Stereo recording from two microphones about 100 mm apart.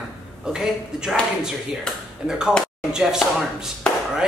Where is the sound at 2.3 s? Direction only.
5° right (ahead or behind).